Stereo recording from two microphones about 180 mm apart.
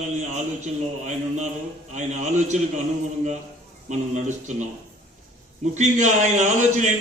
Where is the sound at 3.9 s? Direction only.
40° right (ahead or behind).